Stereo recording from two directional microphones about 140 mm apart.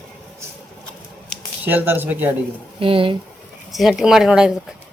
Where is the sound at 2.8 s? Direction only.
40° right (ahead or behind).